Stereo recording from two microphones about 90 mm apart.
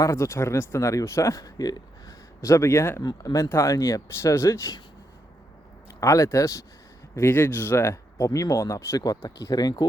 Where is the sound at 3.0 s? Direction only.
40° left (ahead or behind).